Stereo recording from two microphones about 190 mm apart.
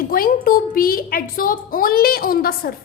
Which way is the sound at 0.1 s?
50° left (ahead or behind).